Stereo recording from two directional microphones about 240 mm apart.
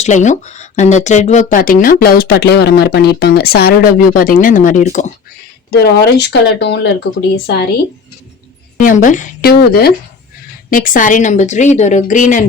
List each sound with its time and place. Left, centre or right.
0.0 s speech: left
5.7 s speech: left
8.8 s speech: left